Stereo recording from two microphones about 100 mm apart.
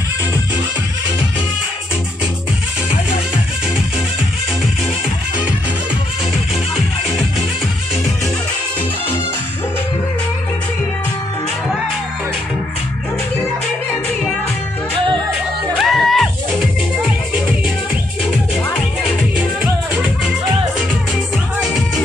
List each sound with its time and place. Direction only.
15.8 s music: centre (ahead or behind)
19.0 s music: 10° right (ahead or behind)
21.5 s music: 10° right (ahead or behind)